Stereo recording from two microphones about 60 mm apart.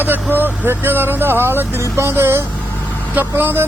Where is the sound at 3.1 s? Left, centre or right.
Right.